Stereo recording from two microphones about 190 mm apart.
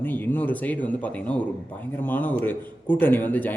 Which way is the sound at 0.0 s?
10° left (ahead or behind).